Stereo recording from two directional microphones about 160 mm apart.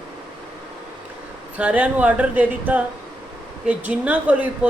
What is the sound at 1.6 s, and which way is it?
Speech, 10° right (ahead or behind).